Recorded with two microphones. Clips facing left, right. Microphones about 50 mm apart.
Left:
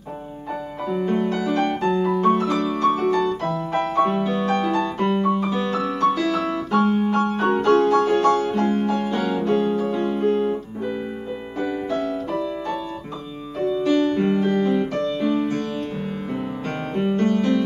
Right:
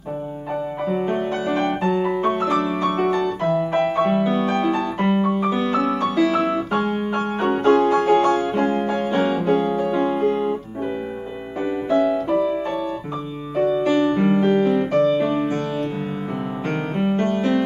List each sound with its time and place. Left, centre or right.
0.8 s music: right
6.0 s piano: centre
6.3 s piano: right
7.3 s music: centre
8.6 s music: right
9.4 s music: centre
10.2 s keyboard: centre
11.9 s music: centre
16.9 s music: centre